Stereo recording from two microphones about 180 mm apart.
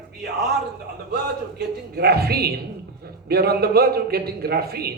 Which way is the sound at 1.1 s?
60° right (ahead or behind).